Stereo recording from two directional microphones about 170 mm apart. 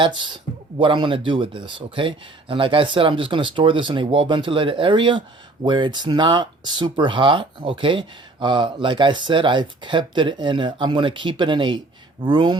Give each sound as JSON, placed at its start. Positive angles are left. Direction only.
{"t": 0.0, "sound": "speech", "side_deg": -30}